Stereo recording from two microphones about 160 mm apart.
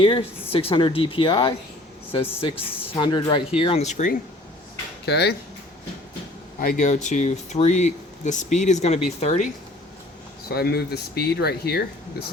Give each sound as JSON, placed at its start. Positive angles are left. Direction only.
{"t": 0.0, "sound": "speech", "side_deg": 35}
{"t": 5.0, "sound": "speech", "side_deg": 90}
{"t": 6.6, "sound": "speech", "side_deg": 55}
{"t": 10.5, "sound": "speech", "side_deg": 75}